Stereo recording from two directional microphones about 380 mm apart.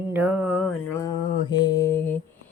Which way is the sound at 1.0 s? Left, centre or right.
Centre.